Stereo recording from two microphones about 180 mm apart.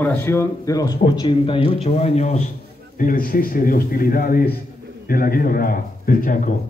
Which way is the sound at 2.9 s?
50° left (ahead or behind).